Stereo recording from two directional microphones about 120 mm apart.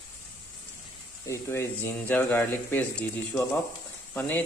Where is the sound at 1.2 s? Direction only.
25° left (ahead or behind).